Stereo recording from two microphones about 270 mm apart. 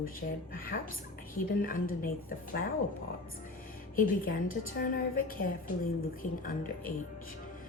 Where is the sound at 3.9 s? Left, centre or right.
Left.